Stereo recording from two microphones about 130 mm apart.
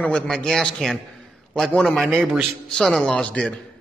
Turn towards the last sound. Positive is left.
turn(degrees=10)  # may be behind; listen again after turning